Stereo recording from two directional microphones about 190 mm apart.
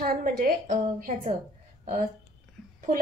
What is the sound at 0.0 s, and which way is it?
A woman's voice, 50° right (ahead or behind).